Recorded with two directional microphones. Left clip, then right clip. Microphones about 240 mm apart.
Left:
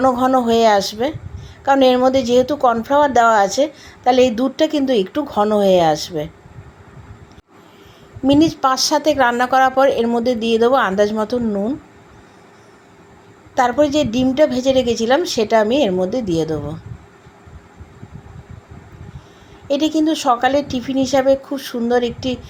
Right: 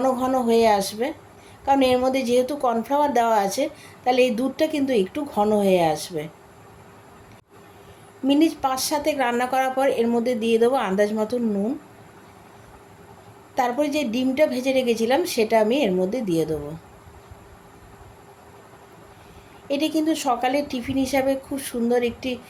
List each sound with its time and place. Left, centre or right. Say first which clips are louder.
0.0 s a woman's voice: left 7 dB; centre
8.3 s a woman's voice: left 6 dB; centre
13.6 s a woman's voice: left 7 dB; centre
19.6 s a woman's voice: left 6 dB; centre